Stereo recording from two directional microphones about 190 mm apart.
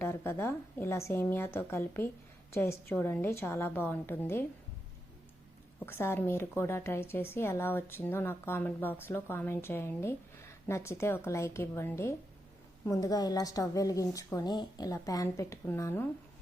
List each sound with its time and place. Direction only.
0.0 s a woman's voice: 15° left (ahead or behind)
5.8 s a woman's voice: 15° left (ahead or behind)